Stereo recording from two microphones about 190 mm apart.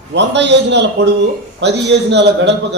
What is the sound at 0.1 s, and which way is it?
A man's voice, 65° right (ahead or behind).